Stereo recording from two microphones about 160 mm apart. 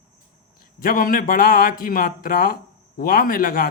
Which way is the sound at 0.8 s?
60° left (ahead or behind).